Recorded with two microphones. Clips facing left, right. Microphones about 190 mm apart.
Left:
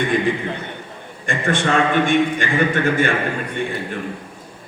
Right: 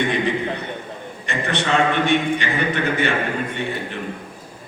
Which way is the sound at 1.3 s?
50° left (ahead or behind).